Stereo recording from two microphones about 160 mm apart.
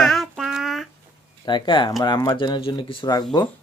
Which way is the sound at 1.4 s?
30° left (ahead or behind).